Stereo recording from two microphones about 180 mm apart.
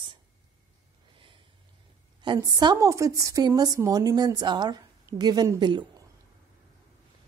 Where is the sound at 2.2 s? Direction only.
20° right (ahead or behind).